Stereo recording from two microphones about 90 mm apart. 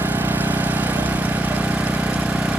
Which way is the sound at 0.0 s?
20° right (ahead or behind).